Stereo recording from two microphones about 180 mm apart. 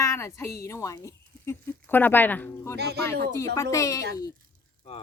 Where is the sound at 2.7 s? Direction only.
65° right (ahead or behind).